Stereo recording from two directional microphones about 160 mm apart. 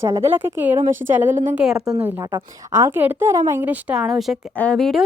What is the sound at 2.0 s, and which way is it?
A woman's voice, 15° right (ahead or behind).